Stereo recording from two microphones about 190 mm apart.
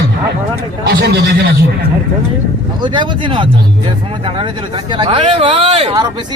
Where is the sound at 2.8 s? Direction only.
25° right (ahead or behind).